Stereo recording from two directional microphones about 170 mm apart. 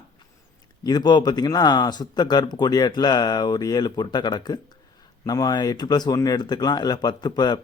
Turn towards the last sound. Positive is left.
turn(degrees=25)  # may be behind; listen again after turning